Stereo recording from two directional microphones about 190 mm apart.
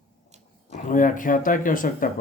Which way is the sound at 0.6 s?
40° left (ahead or behind).